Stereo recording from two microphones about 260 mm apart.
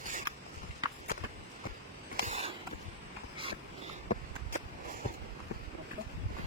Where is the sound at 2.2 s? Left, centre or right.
Right.